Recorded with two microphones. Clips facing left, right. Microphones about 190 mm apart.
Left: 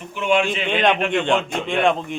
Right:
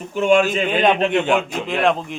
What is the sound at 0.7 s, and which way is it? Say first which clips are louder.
Speech: even; 5° right (ahead or behind).